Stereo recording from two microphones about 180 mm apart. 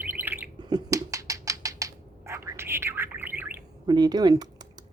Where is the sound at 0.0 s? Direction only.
10° right (ahead or behind).